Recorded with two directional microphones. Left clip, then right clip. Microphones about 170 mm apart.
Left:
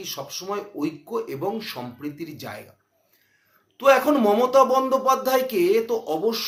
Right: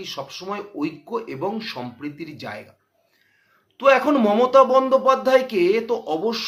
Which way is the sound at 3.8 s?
15° right (ahead or behind).